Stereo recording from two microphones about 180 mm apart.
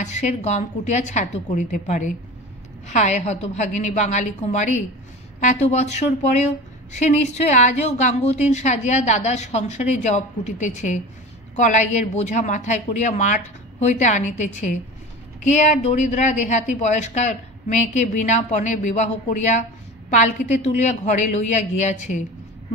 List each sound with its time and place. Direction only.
0.0 s a woman's voice: 40° left (ahead or behind)